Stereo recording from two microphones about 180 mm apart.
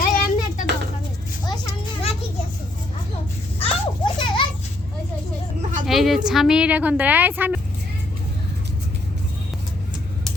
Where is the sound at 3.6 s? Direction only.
25° left (ahead or behind).